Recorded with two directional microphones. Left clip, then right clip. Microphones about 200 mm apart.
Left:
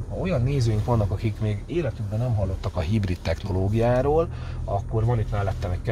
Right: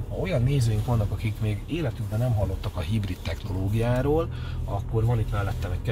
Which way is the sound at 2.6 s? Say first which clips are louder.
Left 5 dB; 45° left (ahead or behind).